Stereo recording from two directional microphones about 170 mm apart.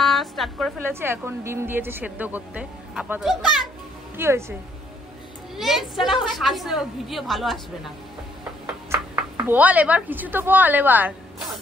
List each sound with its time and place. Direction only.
0.0 s music: centre (ahead or behind)
0.8 s a woman's voice: 15° right (ahead or behind)
4.2 s a woman's voice: 15° right (ahead or behind)
5.6 s a woman's voice: centre (ahead or behind)
8.9 s speech: 10° right (ahead or behind)